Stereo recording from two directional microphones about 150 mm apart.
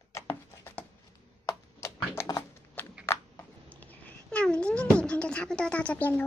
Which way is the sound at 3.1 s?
15° left (ahead or behind).